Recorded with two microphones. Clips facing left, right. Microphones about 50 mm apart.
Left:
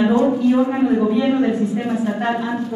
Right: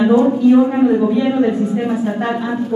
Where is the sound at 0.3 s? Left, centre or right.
Centre.